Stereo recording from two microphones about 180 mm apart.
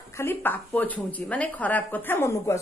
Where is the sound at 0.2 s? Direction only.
10° left (ahead or behind).